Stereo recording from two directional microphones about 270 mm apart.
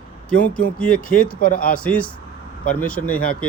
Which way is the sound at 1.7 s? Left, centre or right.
Centre.